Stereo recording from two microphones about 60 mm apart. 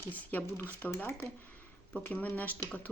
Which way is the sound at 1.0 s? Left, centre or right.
Left.